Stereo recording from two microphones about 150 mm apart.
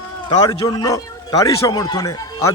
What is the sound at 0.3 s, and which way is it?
A man's voice, 30° left (ahead or behind).